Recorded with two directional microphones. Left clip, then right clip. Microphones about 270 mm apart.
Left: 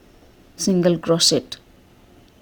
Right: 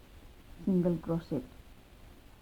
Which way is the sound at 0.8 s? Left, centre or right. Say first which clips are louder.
Left 16 dB; left.